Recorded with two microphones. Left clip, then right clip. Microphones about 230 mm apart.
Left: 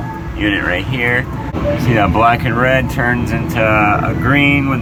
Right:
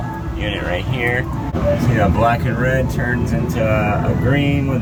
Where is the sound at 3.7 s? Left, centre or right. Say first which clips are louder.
Left 7 dB; left.